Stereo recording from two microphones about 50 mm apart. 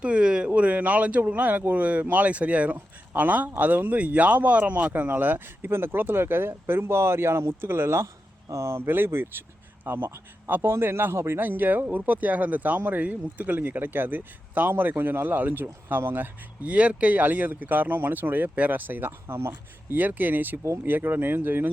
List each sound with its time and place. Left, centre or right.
0.0 s speech: centre; by 11.3 s right
11.3 s speech: right
16.6 s speech: right
18.5 s speech: right
18.8 s speech: right
19.4 s speech: right
20.0 s speech: right